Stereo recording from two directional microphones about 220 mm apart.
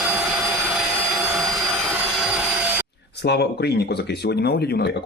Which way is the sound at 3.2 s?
50° left (ahead or behind).